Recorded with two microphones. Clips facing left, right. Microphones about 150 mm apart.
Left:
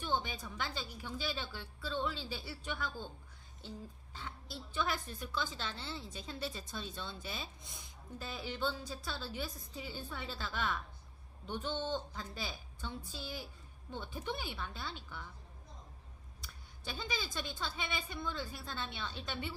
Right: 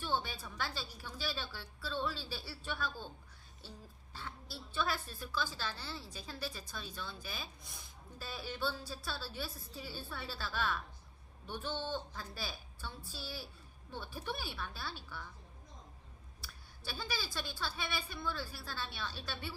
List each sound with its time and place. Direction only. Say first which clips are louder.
0.0 s a woman's voice: left 1 dB; 20° left (ahead or behind)
4.1 s a woman's voice: right 1 dB; 20° left (ahead or behind)
16.4 s a woman's voice: left 2 dB; 20° left (ahead or behind)